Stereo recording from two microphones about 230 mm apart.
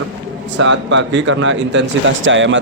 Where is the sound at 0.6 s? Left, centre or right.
Right.